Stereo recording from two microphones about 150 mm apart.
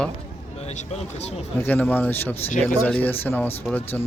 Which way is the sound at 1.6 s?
10° left (ahead or behind).